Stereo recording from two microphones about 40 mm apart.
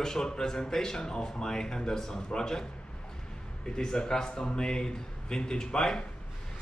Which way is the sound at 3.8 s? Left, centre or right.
Centre.